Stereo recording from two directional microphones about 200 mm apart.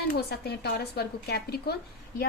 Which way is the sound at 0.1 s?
55° left (ahead or behind).